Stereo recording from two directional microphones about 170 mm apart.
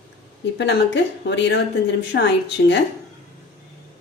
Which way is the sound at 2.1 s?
70° left (ahead or behind).